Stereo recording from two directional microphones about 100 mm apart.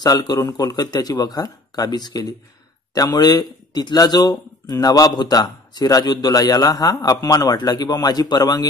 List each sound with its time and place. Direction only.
0.0 s speech: 40° left (ahead or behind)